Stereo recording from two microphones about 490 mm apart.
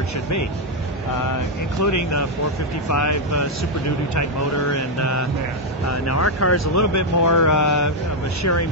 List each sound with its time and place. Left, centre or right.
1.8 s speech: left